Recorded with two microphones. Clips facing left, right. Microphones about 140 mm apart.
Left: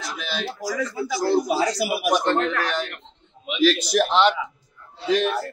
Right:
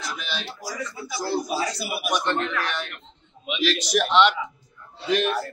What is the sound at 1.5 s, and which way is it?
Speech, 85° left.